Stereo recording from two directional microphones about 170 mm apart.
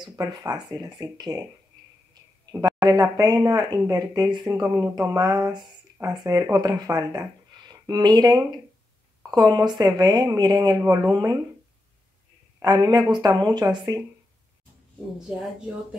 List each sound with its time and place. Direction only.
0.0 s speech: 20° right (ahead or behind)
2.6 s speech: 25° right (ahead or behind)
12.5 s speech: 20° right (ahead or behind)
15.3 s speech: 5° right (ahead or behind)